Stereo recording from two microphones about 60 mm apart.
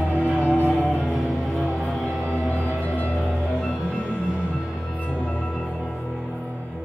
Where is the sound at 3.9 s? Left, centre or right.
Left.